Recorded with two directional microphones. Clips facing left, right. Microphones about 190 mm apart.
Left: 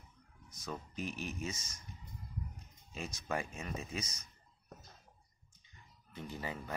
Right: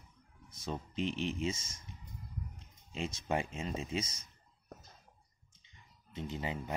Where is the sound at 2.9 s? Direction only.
25° right (ahead or behind).